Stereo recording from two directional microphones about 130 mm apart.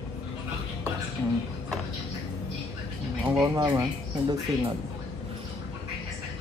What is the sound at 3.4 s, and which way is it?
Speech, 25° right (ahead or behind).